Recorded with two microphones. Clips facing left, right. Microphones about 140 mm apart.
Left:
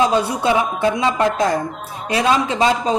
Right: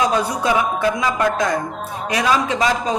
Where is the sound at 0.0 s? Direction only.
30° left (ahead or behind).